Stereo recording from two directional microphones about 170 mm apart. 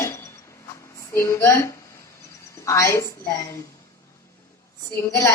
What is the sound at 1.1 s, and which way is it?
A woman's voice, 15° left (ahead or behind).